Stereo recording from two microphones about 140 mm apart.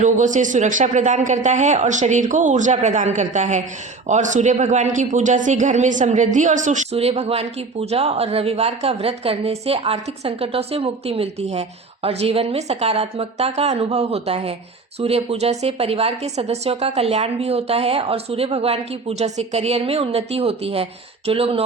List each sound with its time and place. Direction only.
0.0 s speech: 60° right (ahead or behind)
6.9 s a woman's voice: 45° right (ahead or behind)